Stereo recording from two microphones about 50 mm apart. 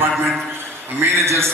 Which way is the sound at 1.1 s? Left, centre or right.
Right.